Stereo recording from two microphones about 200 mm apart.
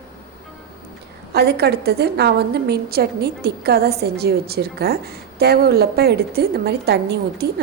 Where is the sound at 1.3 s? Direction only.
55° right (ahead or behind).